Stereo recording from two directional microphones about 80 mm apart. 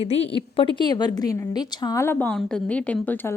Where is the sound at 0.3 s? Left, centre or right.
Left.